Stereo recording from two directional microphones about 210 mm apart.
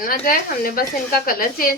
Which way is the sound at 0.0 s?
45° left (ahead or behind).